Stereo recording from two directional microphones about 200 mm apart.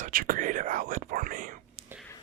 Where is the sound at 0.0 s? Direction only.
45° right (ahead or behind).